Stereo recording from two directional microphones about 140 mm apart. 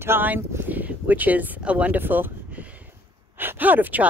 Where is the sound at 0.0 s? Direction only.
15° right (ahead or behind).